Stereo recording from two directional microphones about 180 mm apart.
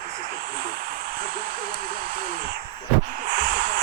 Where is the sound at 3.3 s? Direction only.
55° right (ahead or behind).